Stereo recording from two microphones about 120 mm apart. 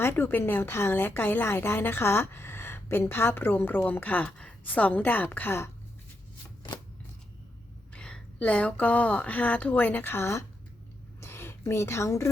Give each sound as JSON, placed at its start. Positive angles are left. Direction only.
{"t": 0.0, "sound": "a woman's voice", "side_deg": 15}
{"t": 7.9, "sound": "a woman's voice", "side_deg": 10}
{"t": 11.2, "sound": "a sound", "side_deg": 20}